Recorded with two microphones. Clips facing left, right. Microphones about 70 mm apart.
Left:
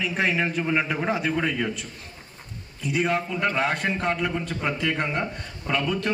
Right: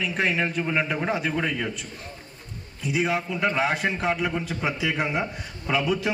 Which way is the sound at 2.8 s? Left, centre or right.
Centre.